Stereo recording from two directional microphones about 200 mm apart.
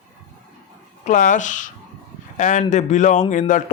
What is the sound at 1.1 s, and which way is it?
A man's voice, 40° left (ahead or behind).